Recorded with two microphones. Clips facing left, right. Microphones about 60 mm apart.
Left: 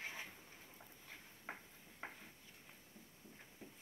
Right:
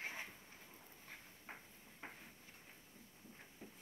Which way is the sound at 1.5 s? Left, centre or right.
Left.